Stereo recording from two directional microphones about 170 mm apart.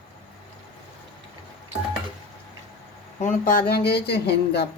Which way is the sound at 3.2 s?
55° left (ahead or behind).